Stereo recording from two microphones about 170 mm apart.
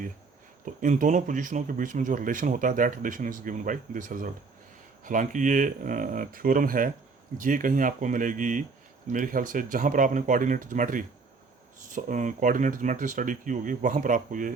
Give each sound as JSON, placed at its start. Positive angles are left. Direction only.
{"t": 0.6, "sound": "speech", "side_deg": -50}